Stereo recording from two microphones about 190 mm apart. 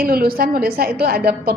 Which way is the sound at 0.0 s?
50° right (ahead or behind).